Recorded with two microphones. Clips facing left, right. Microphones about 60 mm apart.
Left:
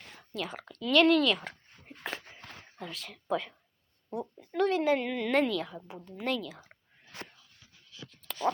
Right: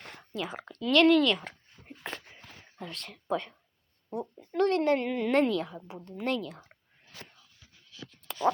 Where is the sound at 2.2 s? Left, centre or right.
Left.